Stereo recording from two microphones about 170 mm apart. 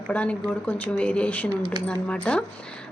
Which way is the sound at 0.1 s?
10° left (ahead or behind).